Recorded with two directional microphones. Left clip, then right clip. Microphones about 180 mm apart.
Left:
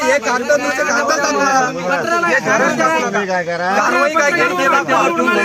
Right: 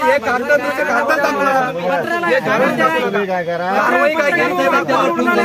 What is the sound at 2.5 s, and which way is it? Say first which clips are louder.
Speech: left 1 dB; 25° right (ahead or behind).